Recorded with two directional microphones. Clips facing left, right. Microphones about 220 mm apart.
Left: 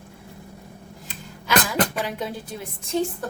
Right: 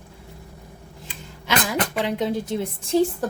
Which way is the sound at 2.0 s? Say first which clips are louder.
Right 5 dB; 20° right (ahead or behind).